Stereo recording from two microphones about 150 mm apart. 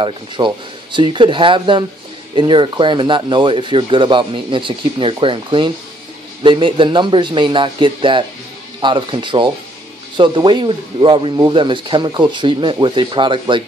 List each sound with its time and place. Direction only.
0.4 s speech: 25° right (ahead or behind)